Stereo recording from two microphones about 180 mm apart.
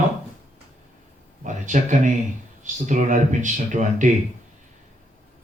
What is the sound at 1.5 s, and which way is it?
Speech, 45° right (ahead or behind).